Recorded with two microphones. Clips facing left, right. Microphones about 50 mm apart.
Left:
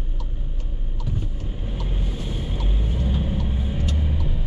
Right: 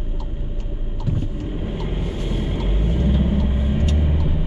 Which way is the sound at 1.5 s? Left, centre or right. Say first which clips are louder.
Right 4 dB; right.